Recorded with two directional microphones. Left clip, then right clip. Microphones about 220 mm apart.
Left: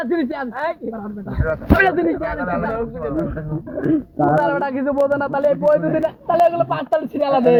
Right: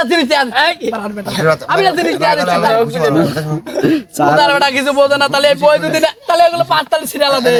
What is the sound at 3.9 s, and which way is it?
Speech, 45° right (ahead or behind).